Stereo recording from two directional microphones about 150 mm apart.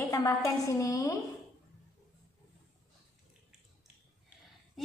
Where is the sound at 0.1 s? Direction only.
20° left (ahead or behind).